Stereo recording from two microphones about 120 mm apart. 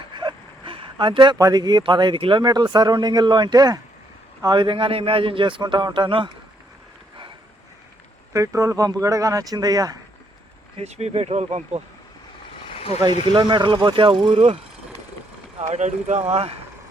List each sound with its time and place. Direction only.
0.1 s a sound: 40° right (ahead or behind)
1.8 s a man's voice: 40° right (ahead or behind)
2.4 s a man's voice: 35° right (ahead or behind)
8.3 s speech: 25° right (ahead or behind)
10.8 s speech: 65° right (ahead or behind)
12.6 s vehicle: 55° left (ahead or behind)
13.3 s a man's voice: 40° right (ahead or behind)
15.5 s speech: 70° right (ahead or behind)